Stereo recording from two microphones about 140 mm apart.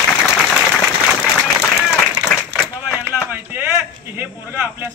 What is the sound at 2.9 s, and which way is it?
Speech, 10° right (ahead or behind).